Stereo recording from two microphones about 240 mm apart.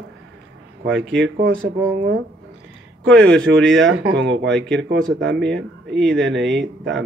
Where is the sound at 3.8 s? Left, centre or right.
Right.